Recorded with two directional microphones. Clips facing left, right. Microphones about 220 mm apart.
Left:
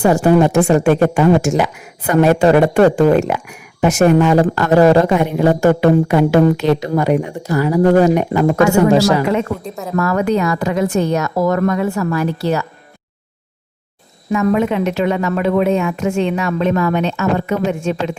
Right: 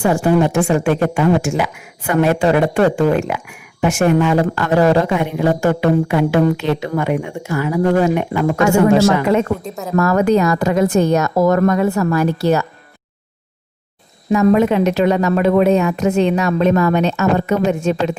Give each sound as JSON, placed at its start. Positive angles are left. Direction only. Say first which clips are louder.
{"t": 0.0, "sound": "speech", "louder": "left 3 dB", "side_deg": 40}
{"t": 9.6, "sound": "speech", "louder": "even", "side_deg": -5}
{"t": 10.0, "sound": "a woman's voice", "louder": "right 2 dB", "side_deg": -40}
{"t": 14.3, "sound": "a woman's voice", "louder": "right 3 dB", "side_deg": -35}